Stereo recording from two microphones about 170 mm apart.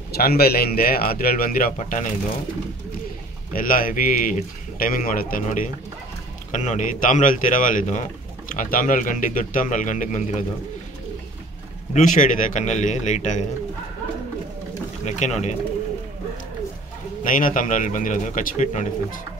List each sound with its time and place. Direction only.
0.1 s a man's voice: 65° left (ahead or behind); by 2.1 s 45° left (ahead or behind)
3.5 s a man's voice: 55° left (ahead or behind)
11.9 s speech: 50° left (ahead or behind)
15.0 s speech: 45° left (ahead or behind)
17.2 s speech: 55° left (ahead or behind)